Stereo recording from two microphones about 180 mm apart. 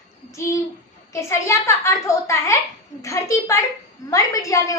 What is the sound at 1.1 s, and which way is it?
A child's voice, 15° left (ahead or behind).